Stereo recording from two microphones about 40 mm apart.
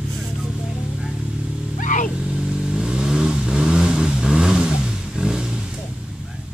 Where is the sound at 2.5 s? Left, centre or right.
Centre.